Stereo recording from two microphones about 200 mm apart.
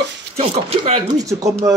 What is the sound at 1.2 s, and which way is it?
Speech, 15° right (ahead or behind).